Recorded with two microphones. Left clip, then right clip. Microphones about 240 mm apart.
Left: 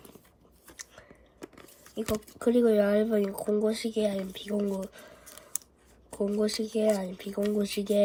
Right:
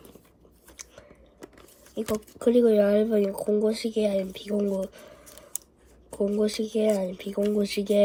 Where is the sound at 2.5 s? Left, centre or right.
Left.